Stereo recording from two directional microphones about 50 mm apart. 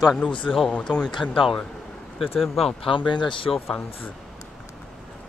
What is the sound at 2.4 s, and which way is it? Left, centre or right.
Speech, centre.